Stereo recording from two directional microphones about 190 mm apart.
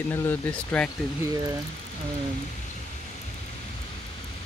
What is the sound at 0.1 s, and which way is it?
Speech, 10° left (ahead or behind).